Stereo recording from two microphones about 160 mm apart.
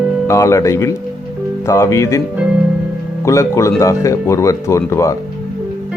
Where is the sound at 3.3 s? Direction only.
20° left (ahead or behind).